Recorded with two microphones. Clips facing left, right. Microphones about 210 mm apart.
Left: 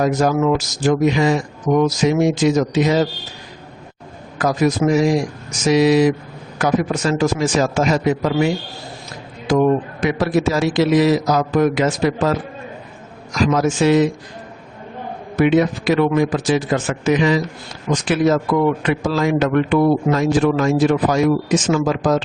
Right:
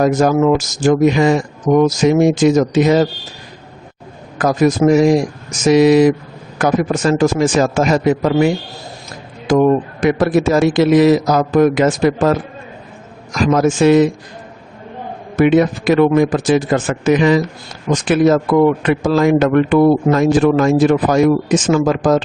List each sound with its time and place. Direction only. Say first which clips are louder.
0.0 s a man's voice: right 4 dB; 50° right (ahead or behind)
4.4 s a man's voice: right 4 dB; 50° right (ahead or behind)
9.5 s a man's voice: right 3 dB; 55° right (ahead or behind)
15.4 s a man's voice: right 3 dB; 50° right (ahead or behind)
18.8 s a man's voice: right 5 dB; 50° right (ahead or behind)